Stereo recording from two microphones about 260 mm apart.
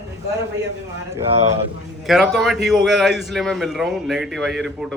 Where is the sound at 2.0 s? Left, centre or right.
Centre.